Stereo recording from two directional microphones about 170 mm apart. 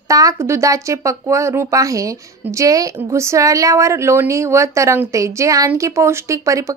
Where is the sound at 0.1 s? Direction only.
20° right (ahead or behind).